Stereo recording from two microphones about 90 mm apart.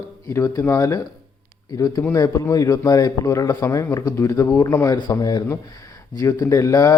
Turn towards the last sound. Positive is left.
turn(degrees=35)  # may be behind; listen again after turning